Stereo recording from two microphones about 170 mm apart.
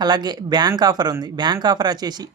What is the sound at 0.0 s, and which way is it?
Speech, 25° right (ahead or behind).